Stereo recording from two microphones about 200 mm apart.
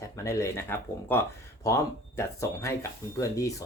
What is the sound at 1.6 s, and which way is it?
Speech, 15° left (ahead or behind).